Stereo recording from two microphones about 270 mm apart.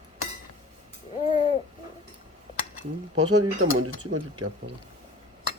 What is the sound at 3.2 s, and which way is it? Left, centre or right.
Speech, right.